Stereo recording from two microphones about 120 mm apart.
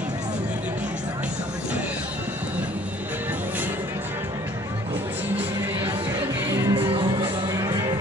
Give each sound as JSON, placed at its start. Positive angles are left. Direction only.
{"t": 6.7, "sound": "music", "side_deg": -45}